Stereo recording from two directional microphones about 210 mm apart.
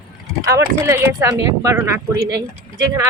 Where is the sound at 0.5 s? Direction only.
15° right (ahead or behind).